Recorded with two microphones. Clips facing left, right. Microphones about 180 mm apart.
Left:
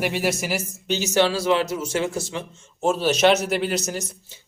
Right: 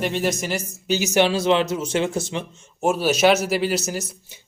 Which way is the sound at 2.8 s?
10° right (ahead or behind).